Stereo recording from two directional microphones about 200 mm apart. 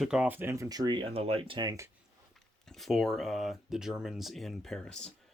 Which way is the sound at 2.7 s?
Centre (ahead or behind).